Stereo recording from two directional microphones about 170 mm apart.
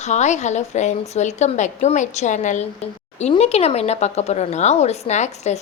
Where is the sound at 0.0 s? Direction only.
45° left (ahead or behind).